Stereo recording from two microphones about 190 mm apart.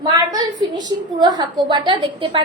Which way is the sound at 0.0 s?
20° right (ahead or behind).